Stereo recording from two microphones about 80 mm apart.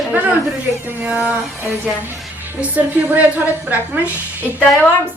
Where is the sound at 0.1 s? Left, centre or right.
Centre.